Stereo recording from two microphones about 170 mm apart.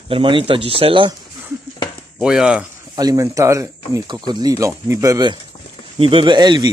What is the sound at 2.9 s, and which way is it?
Speech, 20° right (ahead or behind).